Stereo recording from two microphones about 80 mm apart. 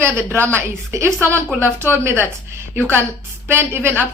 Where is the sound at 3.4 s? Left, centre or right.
Right.